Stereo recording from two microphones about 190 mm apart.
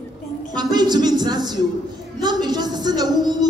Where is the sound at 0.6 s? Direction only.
20° right (ahead or behind).